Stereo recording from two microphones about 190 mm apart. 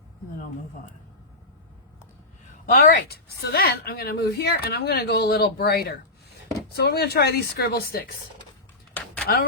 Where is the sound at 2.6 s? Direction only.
50° left (ahead or behind).